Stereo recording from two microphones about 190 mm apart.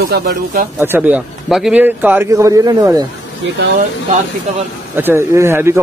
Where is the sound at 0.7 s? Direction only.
10° right (ahead or behind).